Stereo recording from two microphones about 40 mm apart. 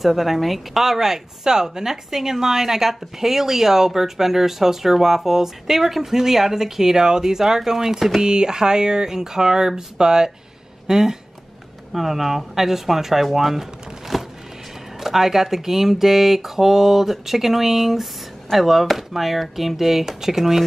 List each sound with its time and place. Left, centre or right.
0.0 s speech: centre